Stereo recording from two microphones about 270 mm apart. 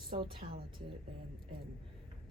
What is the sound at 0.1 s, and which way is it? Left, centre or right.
Speech, centre.